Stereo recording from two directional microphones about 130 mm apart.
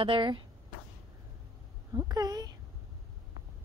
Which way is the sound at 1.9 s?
30° right (ahead or behind).